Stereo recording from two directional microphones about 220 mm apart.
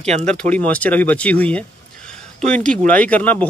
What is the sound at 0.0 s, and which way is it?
Speech, 30° right (ahead or behind).